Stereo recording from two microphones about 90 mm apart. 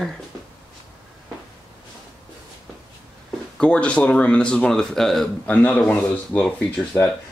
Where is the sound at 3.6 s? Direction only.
15° left (ahead or behind).